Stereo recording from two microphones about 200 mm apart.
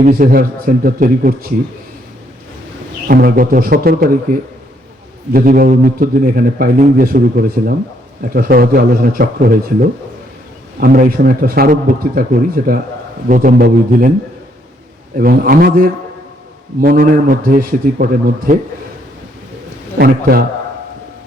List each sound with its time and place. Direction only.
0.0 s a man's voice: 45° right (ahead or behind)
3.1 s a man's voice: 45° right (ahead or behind)
15.2 s a man's voice: 45° right (ahead or behind)
20.0 s a man's voice: 50° right (ahead or behind)